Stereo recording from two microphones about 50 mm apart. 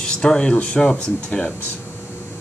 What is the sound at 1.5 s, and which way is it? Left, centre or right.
Air conditioning, left.